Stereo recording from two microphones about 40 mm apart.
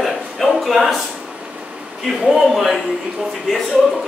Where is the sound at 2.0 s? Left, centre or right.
Centre.